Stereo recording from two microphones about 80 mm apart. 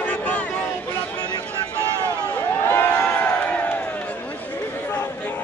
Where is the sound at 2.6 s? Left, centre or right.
Left.